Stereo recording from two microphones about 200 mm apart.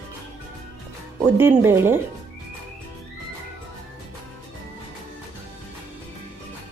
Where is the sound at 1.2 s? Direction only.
10° right (ahead or behind).